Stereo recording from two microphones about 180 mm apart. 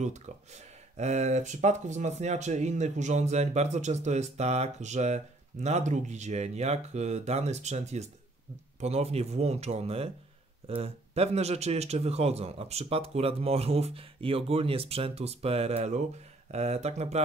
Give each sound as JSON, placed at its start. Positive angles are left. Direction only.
{"t": 0.9, "sound": "speech", "side_deg": -40}